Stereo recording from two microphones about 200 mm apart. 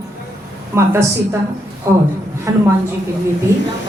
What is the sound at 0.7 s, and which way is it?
Speech, 15° right (ahead or behind).